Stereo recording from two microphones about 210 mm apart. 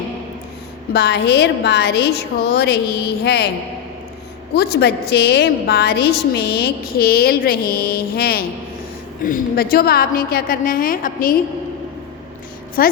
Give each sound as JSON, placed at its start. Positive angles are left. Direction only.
{"t": 0.9, "sound": "a woman's voice", "side_deg": 50}
{"t": 4.5, "sound": "a woman's voice", "side_deg": 50}
{"t": 12.8, "sound": "a woman's voice", "side_deg": 45}